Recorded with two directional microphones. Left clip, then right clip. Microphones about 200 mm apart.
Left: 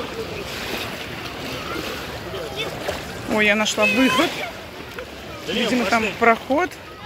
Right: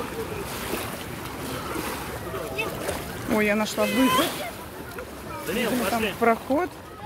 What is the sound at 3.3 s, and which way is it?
Speech, 5° right (ahead or behind).